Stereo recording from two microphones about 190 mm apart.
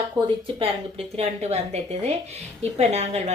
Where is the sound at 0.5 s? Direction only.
30° right (ahead or behind).